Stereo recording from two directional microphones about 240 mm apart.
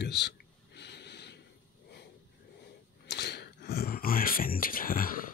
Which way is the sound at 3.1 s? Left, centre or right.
Left.